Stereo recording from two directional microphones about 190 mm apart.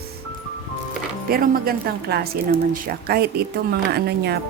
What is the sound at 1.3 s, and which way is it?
A woman's voice, 50° right (ahead or behind).